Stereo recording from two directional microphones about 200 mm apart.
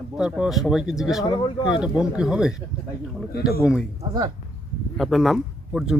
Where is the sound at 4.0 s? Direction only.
20° right (ahead or behind).